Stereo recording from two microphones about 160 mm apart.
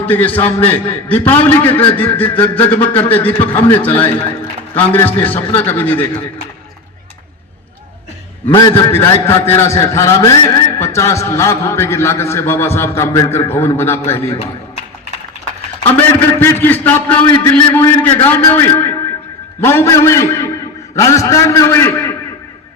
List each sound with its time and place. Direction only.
0.0 s a man's voice: 10° left (ahead or behind)
8.4 s a man's voice: 30° left (ahead or behind)
8.9 s a man's voice: 15° left (ahead or behind)
15.8 s a man's voice: 15° left (ahead or behind)